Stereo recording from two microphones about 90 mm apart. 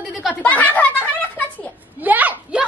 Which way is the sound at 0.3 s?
15° left (ahead or behind).